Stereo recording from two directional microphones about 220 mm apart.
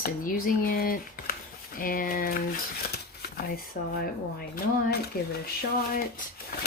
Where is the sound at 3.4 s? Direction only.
40° left (ahead or behind).